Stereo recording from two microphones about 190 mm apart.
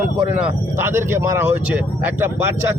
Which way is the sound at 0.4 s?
10° right (ahead or behind).